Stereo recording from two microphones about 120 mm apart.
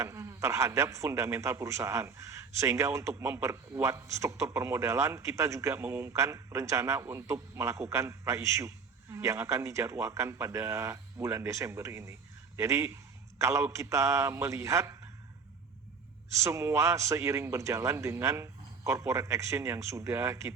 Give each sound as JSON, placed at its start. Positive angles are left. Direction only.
{"t": 0.0, "sound": "a man's voice", "side_deg": -25}
{"t": 16.3, "sound": "a man's voice", "side_deg": -25}